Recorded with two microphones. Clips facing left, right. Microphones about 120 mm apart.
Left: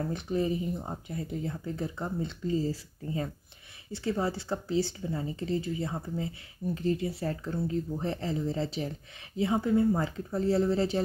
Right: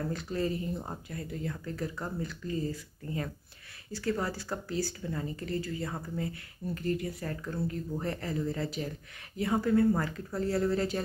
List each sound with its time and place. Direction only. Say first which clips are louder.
0.1 s speech: left 3 dB; 20° left (ahead or behind)